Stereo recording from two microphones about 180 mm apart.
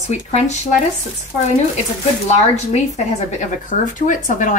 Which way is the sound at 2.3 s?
40° left (ahead or behind).